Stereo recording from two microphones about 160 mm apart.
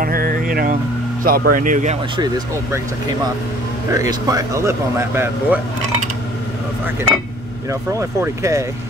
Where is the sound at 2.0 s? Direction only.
30° right (ahead or behind).